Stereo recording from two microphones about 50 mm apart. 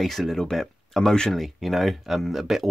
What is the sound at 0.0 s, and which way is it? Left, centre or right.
Speech, centre.